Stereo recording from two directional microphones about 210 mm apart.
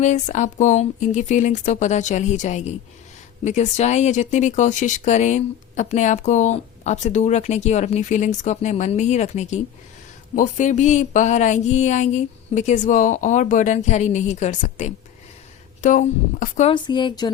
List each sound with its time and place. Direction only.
0.0 s speech: 35° left (ahead or behind)
16.7 s speech: 20° left (ahead or behind)